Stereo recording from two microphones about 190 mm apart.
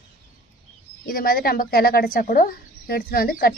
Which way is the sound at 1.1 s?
50° left (ahead or behind).